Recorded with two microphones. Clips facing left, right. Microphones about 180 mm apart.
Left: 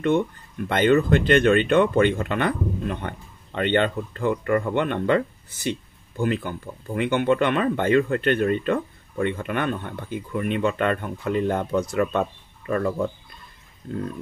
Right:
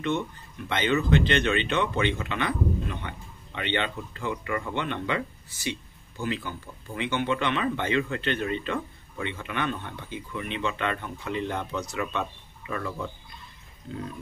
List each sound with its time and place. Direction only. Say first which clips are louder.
0.7 s speech: left 6 dB; 50° left (ahead or behind)